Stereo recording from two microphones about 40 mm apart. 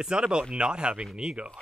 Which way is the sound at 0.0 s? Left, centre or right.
Right.